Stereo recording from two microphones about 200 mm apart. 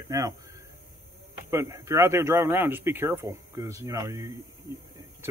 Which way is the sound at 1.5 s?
15° right (ahead or behind).